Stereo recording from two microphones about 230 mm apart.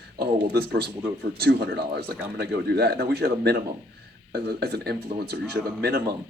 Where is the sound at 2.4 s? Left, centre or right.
Right.